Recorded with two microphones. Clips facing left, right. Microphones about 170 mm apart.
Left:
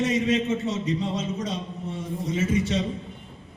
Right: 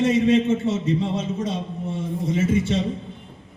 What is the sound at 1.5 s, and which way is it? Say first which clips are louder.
A man's voice: right 4 dB; 25° right (ahead or behind).